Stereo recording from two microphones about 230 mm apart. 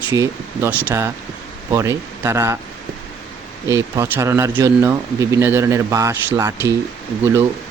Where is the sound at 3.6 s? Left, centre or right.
Centre.